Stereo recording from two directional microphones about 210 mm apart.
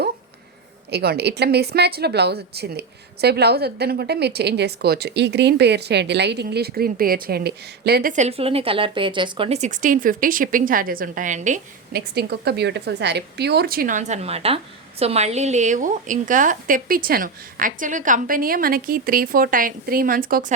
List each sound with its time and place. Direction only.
0.9 s a woman's voice: 50° right (ahead or behind)